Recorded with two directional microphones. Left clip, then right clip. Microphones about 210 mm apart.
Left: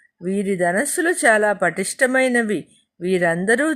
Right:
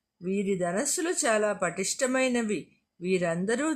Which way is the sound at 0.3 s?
15° left (ahead or behind).